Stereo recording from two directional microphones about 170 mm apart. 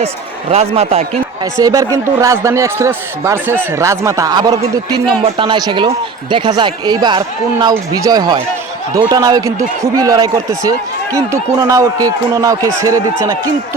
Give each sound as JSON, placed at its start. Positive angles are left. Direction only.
{"t": 0.5, "sound": "a man's voice", "side_deg": -35}
{"t": 1.5, "sound": "speech", "side_deg": -20}